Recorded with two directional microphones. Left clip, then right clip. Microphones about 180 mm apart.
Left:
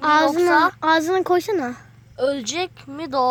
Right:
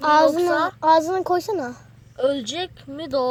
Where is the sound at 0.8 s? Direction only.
30° left (ahead or behind).